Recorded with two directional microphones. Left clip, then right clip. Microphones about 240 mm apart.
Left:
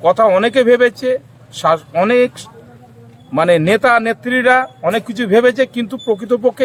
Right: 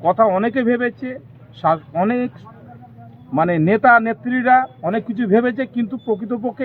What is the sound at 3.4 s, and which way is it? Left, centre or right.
A man's voice, left.